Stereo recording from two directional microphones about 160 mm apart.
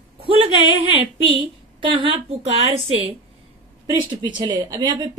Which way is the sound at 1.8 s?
30° right (ahead or behind).